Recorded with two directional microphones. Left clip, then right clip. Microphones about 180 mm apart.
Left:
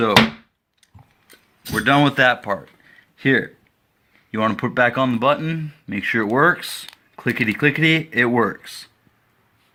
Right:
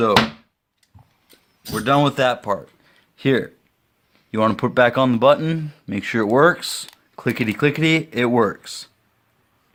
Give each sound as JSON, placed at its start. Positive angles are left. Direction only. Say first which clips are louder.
{"t": 1.8, "sound": "speech", "louder": "left 2 dB", "side_deg": -45}